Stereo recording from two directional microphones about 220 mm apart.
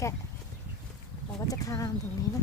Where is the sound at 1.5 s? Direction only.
15° left (ahead or behind).